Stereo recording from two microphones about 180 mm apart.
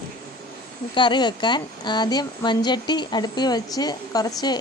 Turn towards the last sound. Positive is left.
turn(degrees=20)  # may be behind; listen again after turning